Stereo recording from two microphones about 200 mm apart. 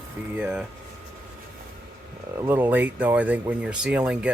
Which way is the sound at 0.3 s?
5° right (ahead or behind).